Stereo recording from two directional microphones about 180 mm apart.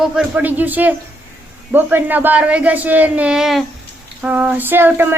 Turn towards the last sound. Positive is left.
turn(degrees=-10)  # may be behind; listen again after turning